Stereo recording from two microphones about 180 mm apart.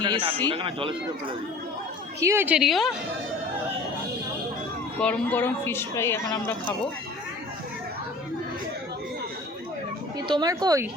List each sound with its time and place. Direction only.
0.0 s speech: 25° right (ahead or behind)
2.2 s a woman's voice: 15° right (ahead or behind)
4.9 s a woman's voice: 10° left (ahead or behind)
10.2 s speech: 25° right (ahead or behind)